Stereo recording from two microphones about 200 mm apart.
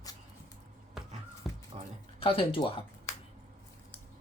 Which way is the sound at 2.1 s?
25° left (ahead or behind).